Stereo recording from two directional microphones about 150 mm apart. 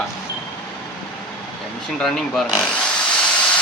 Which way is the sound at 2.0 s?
Centre (ahead or behind).